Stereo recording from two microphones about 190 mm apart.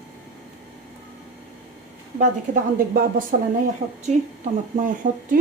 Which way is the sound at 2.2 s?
45° right (ahead or behind).